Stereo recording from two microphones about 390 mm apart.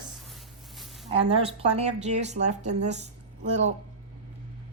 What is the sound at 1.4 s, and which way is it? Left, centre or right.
A woman's voice, centre.